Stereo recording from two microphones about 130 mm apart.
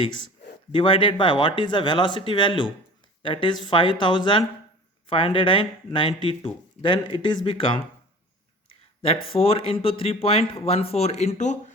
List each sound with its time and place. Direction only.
0.7 s speech: 40° left (ahead or behind)
9.3 s speech: 45° left (ahead or behind); by 11.5 s 60° left (ahead or behind)